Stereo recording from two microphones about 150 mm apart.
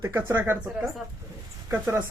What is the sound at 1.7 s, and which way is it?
Speech, 15° right (ahead or behind).